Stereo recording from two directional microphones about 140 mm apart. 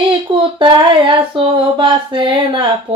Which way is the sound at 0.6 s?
35° right (ahead or behind).